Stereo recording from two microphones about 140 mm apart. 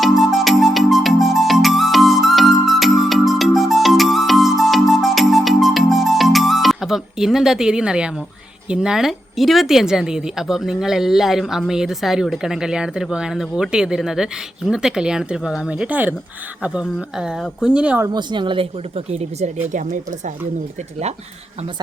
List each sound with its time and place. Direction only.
0.0 s music: centre (ahead or behind)
8.7 s speech: 5° right (ahead or behind)
18.0 s speech: 30° right (ahead or behind); by 20.3 s 60° right (ahead or behind)